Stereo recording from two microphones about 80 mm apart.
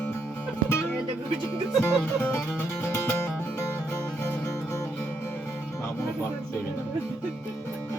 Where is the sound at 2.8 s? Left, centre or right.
Left.